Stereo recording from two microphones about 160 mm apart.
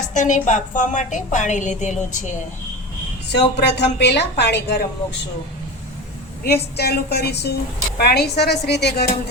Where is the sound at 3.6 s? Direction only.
90° left.